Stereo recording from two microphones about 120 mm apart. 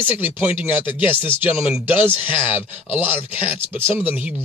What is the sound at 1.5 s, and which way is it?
Speech, 10° right (ahead or behind).